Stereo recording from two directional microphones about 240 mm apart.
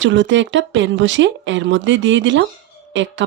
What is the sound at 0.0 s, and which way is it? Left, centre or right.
Speech, right.